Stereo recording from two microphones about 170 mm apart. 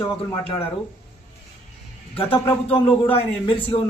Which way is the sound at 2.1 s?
35° left (ahead or behind).